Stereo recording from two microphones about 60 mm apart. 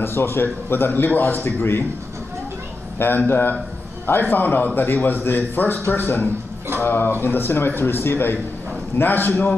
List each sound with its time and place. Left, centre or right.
0.0 s a man's voice: left
3.0 s a man's voice: left